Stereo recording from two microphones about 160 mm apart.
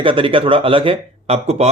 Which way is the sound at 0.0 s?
35° right (ahead or behind).